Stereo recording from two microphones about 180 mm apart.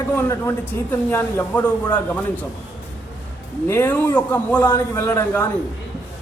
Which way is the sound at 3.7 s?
10° left (ahead or behind).